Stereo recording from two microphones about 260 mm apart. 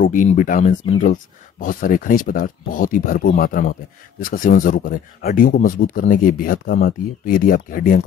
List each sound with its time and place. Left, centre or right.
0.0 s speech: left